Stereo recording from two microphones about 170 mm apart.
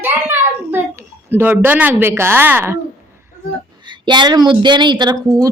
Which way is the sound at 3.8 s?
25° right (ahead or behind).